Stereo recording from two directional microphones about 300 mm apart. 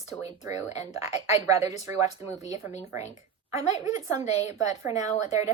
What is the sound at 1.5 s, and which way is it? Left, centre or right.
Speech, centre.